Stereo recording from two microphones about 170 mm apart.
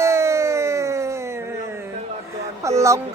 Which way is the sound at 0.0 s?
15° right (ahead or behind).